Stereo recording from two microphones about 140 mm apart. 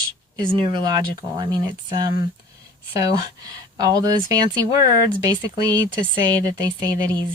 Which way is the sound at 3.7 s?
25° right (ahead or behind).